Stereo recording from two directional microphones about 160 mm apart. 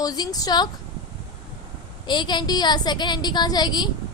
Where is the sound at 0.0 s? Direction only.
25° left (ahead or behind).